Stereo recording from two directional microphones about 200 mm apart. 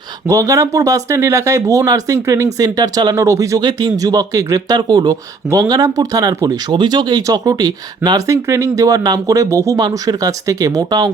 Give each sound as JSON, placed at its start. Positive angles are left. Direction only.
{"t": 0.3, "sound": "speech", "side_deg": -15}